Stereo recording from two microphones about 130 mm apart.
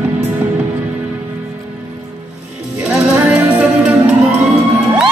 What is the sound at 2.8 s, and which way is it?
Music, 10° right (ahead or behind).